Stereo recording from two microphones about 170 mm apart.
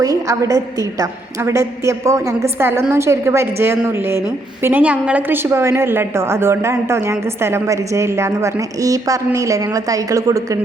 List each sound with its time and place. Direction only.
0.0 s a woman's voice: 20° right (ahead or behind)